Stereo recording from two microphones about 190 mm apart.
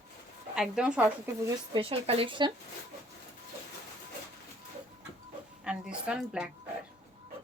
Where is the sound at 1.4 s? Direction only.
25° right (ahead or behind).